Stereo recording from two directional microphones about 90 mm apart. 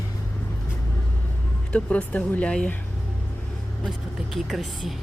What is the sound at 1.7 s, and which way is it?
Speech, 15° left (ahead or behind).